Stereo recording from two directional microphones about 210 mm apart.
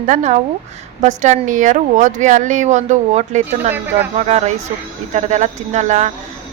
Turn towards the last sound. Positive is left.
turn(degrees=-35)  # may be behind; listen again after turning